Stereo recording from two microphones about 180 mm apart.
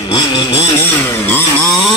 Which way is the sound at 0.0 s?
25° left (ahead or behind).